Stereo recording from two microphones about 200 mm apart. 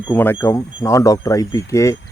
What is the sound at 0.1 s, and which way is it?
Speech, 10° left (ahead or behind).